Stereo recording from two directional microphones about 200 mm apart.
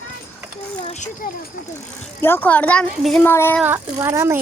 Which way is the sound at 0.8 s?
35° left (ahead or behind).